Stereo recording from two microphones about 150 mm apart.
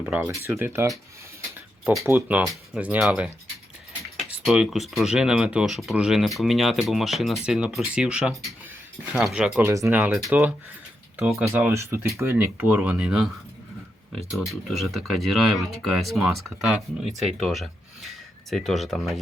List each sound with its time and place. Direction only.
0.0 s speech: 10° right (ahead or behind)
2.0 s speech: 10° right (ahead or behind)
9.6 s speech: 20° right (ahead or behind); by 11.5 s centre (ahead or behind)
11.5 s speech: 15° right (ahead or behind); by 19.2 s centre (ahead or behind)